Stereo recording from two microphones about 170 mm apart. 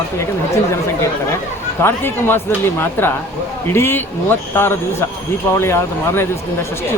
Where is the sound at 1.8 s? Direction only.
15° left (ahead or behind).